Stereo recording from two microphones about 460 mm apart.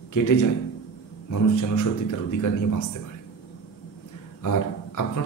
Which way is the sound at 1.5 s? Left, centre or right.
Left.